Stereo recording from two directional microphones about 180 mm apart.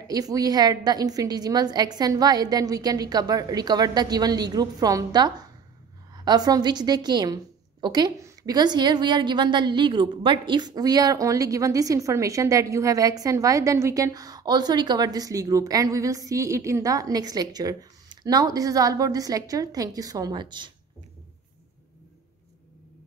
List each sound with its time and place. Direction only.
0.0 s a woman's voice: 20° right (ahead or behind)